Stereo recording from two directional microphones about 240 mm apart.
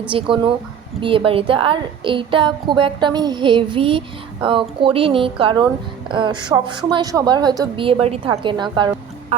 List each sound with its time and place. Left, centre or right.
0.1 s a woman's voice: right